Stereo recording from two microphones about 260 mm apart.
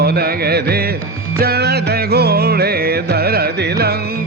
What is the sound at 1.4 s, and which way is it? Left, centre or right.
Music, right.